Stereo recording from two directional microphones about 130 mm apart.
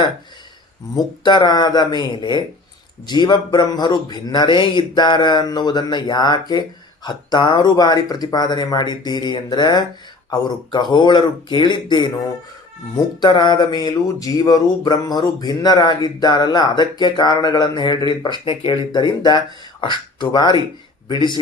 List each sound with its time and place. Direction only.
0.9 s speech: 35° left (ahead or behind)
13.2 s speech: 35° left (ahead or behind)